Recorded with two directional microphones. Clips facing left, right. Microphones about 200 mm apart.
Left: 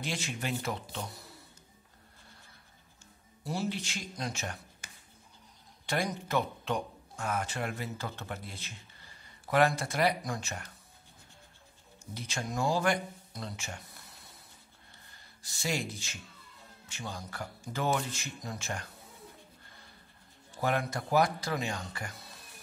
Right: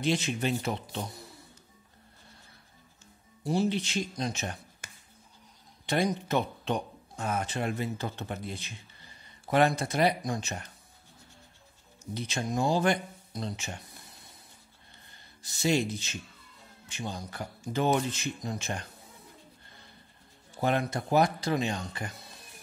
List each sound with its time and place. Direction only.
0.0 s speech: 20° right (ahead or behind)
3.4 s speech: 20° right (ahead or behind)
4.8 s music: 60° right (ahead or behind)
5.9 s speech: 20° right (ahead or behind)
12.1 s speech: 20° right (ahead or behind)
15.4 s speech: 20° right (ahead or behind)
20.6 s speech: 25° right (ahead or behind)